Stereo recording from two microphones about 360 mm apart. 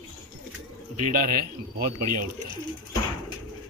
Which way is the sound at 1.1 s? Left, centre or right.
Right.